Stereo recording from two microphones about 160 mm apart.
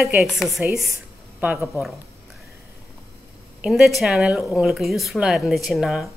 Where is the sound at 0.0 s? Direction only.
Centre (ahead or behind).